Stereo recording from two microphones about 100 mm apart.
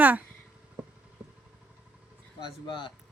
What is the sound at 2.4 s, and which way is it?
Speech, 55° left (ahead or behind).